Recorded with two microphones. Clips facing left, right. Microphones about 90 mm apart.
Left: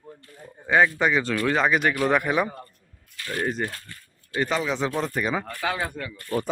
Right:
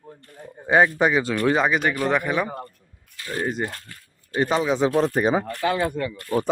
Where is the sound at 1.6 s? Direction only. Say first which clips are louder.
Even; centre (ahead or behind).